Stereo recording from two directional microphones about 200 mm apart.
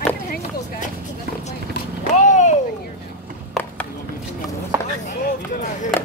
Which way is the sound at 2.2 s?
35° left (ahead or behind).